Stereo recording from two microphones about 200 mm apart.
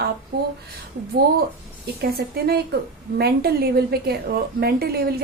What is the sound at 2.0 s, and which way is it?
A woman's voice, 50° right (ahead or behind).